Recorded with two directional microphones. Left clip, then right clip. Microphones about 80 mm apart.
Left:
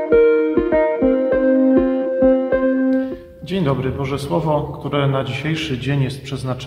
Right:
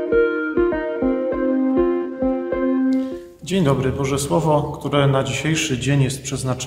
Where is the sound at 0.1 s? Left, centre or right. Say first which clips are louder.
Left 6 dB; centre.